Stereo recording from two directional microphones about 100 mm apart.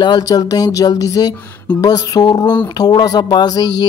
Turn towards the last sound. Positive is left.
turn(degrees=40)  # may be behind; listen again after turning